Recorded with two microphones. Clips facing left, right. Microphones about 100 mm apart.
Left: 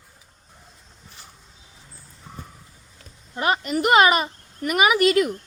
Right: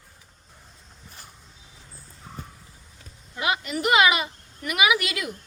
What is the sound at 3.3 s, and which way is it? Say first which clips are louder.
A woman's voice: left 4 dB; 40° left (ahead or behind).